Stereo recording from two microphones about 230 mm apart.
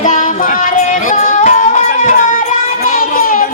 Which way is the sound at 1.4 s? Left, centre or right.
Left.